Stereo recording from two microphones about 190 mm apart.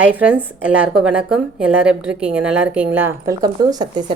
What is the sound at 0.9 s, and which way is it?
Speech, 5° right (ahead or behind).